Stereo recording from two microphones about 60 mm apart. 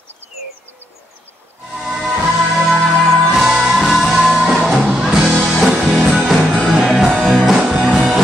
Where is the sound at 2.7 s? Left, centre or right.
Centre.